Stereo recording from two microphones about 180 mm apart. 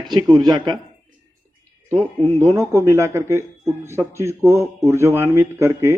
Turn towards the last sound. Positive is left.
turn(degrees=-15)  # may be behind; listen again after turning